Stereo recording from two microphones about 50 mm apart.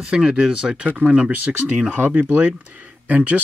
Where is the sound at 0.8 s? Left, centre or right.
Right.